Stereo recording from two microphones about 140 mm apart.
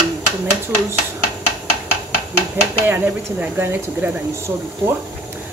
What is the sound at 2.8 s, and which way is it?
Speech, 15° right (ahead or behind).